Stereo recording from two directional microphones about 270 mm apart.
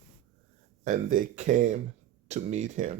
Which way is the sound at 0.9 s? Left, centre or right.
Right.